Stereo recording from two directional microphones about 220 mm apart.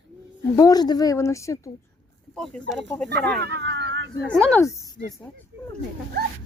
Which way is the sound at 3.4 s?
50° right (ahead or behind).